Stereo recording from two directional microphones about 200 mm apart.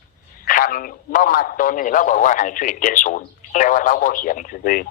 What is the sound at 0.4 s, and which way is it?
A man's voice, 45° left (ahead or behind).